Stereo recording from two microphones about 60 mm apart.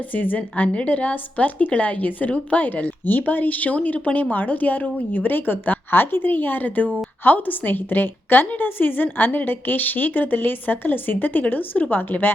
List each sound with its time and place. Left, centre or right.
0.1 s a woman's voice: left